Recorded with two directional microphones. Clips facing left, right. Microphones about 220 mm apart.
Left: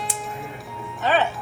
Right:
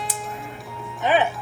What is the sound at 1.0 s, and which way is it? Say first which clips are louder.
Music: right 1 dB; 15° right (ahead or behind).